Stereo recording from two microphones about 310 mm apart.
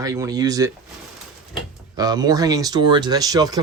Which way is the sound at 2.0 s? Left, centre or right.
Centre.